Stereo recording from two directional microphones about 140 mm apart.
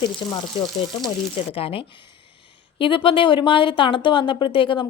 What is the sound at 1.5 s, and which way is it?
Speech, 45° left (ahead or behind).